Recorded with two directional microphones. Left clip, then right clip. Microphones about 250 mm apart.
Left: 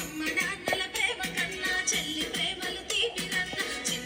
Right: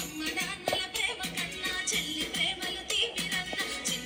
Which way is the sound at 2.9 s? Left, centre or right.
Right.